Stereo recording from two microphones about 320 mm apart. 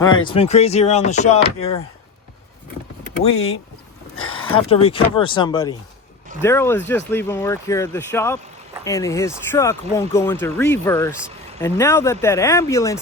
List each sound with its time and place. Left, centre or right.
0.0 s speech: centre
3.3 s speech: left
4.1 s a sound: left
4.5 s speech: centre